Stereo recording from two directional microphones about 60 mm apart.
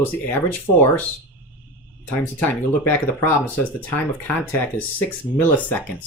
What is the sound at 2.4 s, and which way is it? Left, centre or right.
Speech, left.